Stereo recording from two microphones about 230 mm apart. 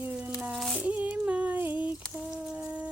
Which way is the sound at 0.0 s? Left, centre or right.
Centre.